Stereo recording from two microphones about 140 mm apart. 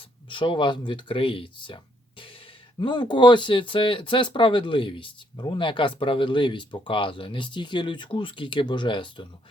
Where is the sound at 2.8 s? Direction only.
30° left (ahead or behind).